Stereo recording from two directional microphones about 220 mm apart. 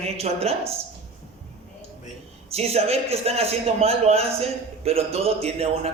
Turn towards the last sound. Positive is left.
turn(degrees=-25)  # may be behind; listen again after turning